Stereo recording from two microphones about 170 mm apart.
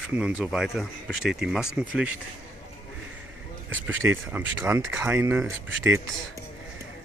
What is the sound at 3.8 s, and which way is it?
Speech, 10° right (ahead or behind).